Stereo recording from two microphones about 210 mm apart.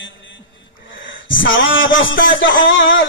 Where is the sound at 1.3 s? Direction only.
65° left (ahead or behind).